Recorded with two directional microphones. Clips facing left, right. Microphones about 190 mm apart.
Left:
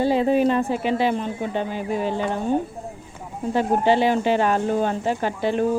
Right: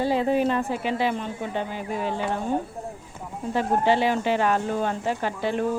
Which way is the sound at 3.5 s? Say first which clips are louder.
Left 3 dB; 30° left (ahead or behind).